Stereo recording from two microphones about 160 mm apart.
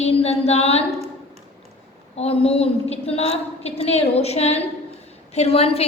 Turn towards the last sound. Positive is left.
turn(degrees=40)  # may be behind; listen again after turning